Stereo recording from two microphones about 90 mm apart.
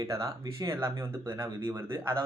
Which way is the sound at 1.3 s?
55° right (ahead or behind).